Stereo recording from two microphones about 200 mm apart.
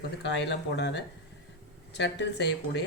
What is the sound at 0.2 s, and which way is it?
Speech, 60° left (ahead or behind).